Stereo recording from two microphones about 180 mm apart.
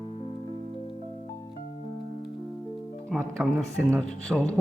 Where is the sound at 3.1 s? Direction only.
Centre (ahead or behind).